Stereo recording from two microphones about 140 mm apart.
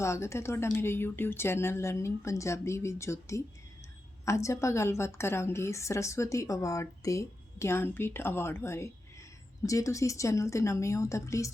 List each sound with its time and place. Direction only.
0.0 s a woman's voice: 20° left (ahead or behind)